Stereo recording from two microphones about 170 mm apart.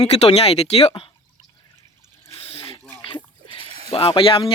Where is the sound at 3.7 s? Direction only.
35° right (ahead or behind).